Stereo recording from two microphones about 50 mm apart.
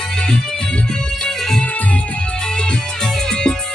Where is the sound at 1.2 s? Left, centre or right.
Centre.